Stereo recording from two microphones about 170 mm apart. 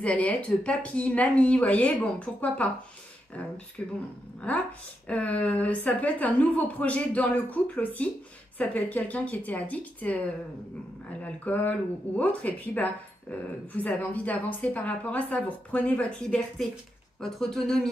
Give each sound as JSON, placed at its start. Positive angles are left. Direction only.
{"t": 0.0, "sound": "speech", "side_deg": 5}
{"t": 3.8, "sound": "speech", "side_deg": 10}
{"t": 5.0, "sound": "speech", "side_deg": 10}
{"t": 11.2, "sound": "speech", "side_deg": 10}